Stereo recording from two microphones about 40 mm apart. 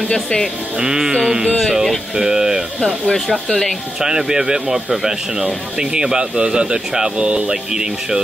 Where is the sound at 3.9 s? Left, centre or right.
Centre.